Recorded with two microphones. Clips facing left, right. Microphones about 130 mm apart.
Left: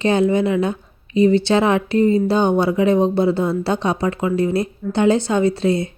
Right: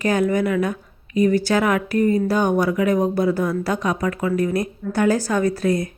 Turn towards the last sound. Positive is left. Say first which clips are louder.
# left 2 dB
turn(degrees=25)  # may be behind; listen again after turning